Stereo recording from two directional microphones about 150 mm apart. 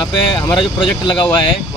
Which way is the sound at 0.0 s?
30° left (ahead or behind).